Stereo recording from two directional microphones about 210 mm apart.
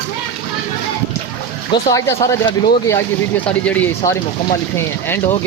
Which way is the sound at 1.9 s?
15° left (ahead or behind).